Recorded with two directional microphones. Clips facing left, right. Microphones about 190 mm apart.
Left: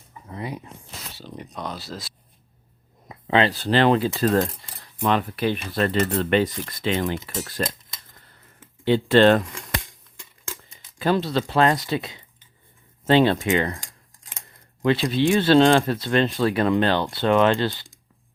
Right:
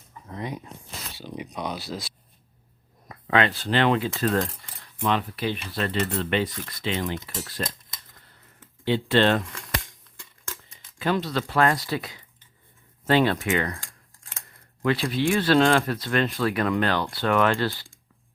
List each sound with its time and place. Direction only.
0.3 s a sound: 5° left (ahead or behind)
1.1 s speech: 5° right (ahead or behind)
3.1 s speech: 25° left (ahead or behind)
5.0 s speech: 50° left (ahead or behind)
8.8 s speech: 50° left (ahead or behind)
11.0 s speech: 30° left (ahead or behind)